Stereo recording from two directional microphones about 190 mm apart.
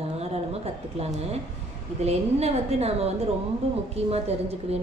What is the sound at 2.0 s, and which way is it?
A woman's voice, 35° right (ahead or behind).